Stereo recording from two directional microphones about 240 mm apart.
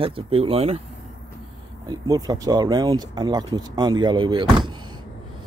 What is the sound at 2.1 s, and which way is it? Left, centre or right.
Speech, centre.